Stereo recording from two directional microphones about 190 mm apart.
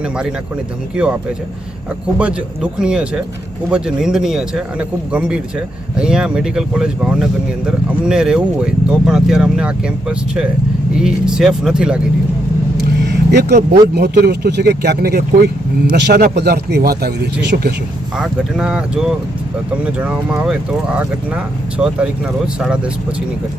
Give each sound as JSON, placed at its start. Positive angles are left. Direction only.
{"t": 0.0, "sound": "speech", "side_deg": -5}
{"t": 12.8, "sound": "vehicle", "side_deg": -60}
{"t": 13.9, "sound": "speech", "side_deg": -60}
{"t": 18.2, "sound": "speech", "side_deg": -5}